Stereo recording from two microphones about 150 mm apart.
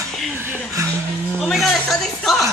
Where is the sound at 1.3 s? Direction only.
Centre (ahead or behind).